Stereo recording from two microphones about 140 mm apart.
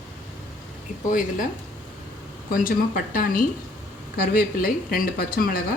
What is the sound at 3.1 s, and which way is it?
Speech, 90° left.